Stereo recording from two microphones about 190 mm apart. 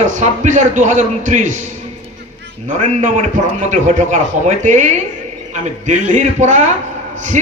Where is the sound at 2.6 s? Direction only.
40° right (ahead or behind).